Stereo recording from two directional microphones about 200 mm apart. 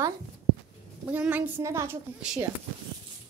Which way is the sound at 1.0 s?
10° right (ahead or behind).